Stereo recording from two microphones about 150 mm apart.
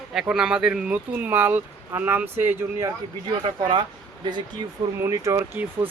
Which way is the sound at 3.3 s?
30° right (ahead or behind).